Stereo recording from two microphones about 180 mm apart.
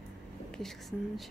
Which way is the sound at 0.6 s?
Centre (ahead or behind).